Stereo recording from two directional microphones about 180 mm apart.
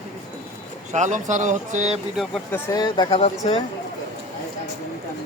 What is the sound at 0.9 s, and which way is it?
Speech, 40° right (ahead or behind).